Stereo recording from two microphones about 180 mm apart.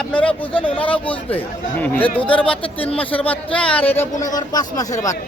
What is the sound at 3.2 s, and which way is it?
Speech, 5° left (ahead or behind).